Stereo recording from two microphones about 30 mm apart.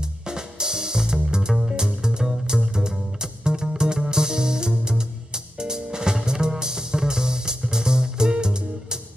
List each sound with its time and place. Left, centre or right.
0.3 s drum kit: right
1.6 s music: right